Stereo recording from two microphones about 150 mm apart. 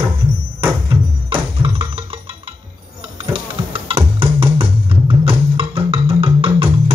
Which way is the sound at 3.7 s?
35° right (ahead or behind).